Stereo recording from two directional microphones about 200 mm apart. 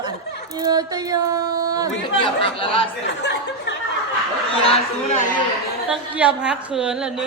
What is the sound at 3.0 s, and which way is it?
Speech, 60° left (ahead or behind).